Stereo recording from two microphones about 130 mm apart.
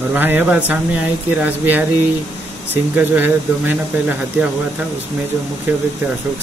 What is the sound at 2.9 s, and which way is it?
Speech, 15° right (ahead or behind).